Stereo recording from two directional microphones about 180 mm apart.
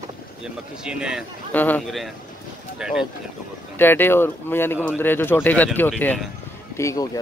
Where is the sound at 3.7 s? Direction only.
10° left (ahead or behind).